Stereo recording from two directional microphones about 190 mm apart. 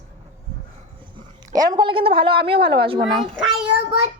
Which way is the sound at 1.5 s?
20° right (ahead or behind).